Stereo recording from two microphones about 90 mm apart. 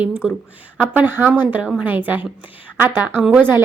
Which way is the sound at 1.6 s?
5° right (ahead or behind).